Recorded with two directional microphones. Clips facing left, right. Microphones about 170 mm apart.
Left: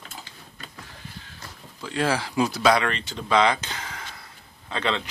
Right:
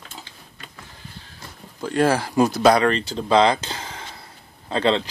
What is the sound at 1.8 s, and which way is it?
Speech, 50° right (ahead or behind).